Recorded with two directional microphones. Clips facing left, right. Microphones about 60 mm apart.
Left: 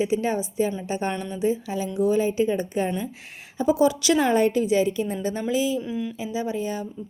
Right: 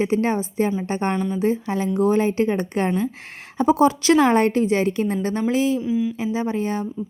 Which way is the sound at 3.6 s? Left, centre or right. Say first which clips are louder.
Right 3 dB; right.